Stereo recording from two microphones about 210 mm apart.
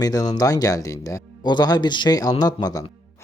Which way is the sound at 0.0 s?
20° left (ahead or behind).